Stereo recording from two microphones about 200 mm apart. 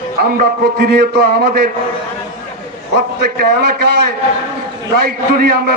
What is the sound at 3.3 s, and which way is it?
Speech, 50° right (ahead or behind).